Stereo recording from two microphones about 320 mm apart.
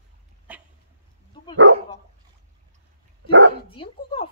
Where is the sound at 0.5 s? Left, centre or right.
Centre.